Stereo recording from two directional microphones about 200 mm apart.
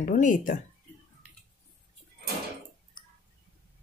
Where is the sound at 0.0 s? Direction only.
40° left (ahead or behind).